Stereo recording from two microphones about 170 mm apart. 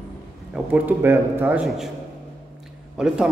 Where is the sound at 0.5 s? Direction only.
10° right (ahead or behind).